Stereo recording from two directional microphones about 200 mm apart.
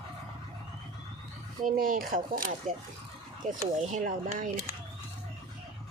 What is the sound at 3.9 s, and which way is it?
Speech, 40° right (ahead or behind).